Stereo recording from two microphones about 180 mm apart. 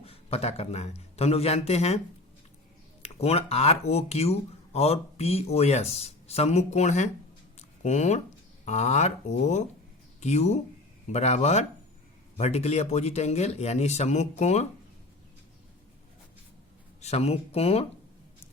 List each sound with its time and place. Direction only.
0.0 s a man's voice: 35° left (ahead or behind)
3.0 s speech: 35° left (ahead or behind)
17.0 s speech: 35° left (ahead or behind)